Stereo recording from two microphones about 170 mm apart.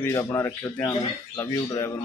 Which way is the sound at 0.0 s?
15° left (ahead or behind).